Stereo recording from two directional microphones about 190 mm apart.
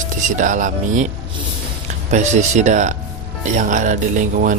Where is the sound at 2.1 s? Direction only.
35° right (ahead or behind).